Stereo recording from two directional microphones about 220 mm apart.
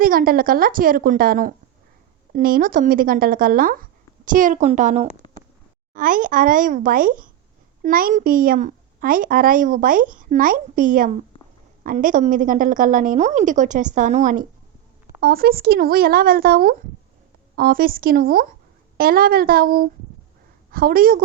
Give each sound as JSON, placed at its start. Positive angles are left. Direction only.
{"t": 0.0, "sound": "a woman's voice", "side_deg": -40}
{"t": 5.2, "sound": "a sound", "side_deg": 20}
{"t": 5.9, "sound": "a woman's voice", "side_deg": -40}